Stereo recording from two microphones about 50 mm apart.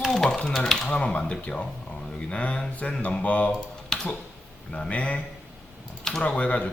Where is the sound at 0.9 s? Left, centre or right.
Left.